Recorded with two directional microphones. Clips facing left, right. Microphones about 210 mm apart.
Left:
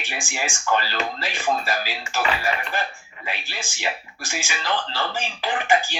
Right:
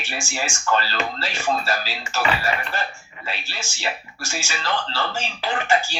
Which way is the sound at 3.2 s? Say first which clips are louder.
Even; 15° left (ahead or behind).